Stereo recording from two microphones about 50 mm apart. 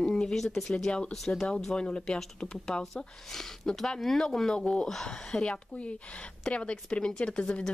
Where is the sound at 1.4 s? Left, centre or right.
Centre.